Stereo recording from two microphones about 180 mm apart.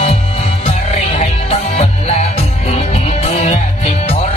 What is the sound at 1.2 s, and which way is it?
Music, 35° left (ahead or behind).